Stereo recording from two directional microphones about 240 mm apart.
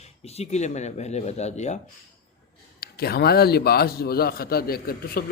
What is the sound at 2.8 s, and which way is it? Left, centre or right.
A man's voice, left.